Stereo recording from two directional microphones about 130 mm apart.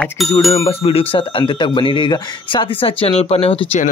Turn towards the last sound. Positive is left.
turn(degrees=50)  # may be behind; listen again after turning